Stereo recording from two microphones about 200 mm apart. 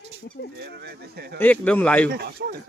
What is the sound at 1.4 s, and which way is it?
Speech, 10° left (ahead or behind).